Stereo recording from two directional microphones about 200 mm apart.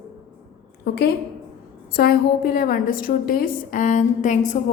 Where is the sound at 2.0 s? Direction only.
50° left (ahead or behind).